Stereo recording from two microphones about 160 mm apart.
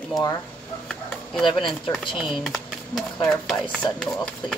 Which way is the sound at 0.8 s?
5° left (ahead or behind).